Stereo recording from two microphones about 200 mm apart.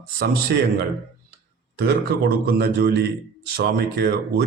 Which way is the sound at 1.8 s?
55° right (ahead or behind).